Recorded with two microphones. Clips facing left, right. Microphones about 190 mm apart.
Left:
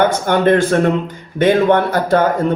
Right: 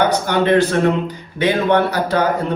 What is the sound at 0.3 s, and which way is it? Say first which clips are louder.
Speech: left 2 dB; 50° left (ahead or behind).